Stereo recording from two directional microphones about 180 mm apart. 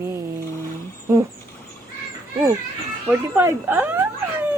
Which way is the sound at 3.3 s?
15° right (ahead or behind).